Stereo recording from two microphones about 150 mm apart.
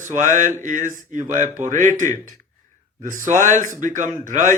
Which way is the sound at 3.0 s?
60° right (ahead or behind).